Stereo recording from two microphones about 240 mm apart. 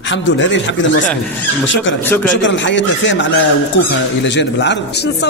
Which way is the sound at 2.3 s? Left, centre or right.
Left.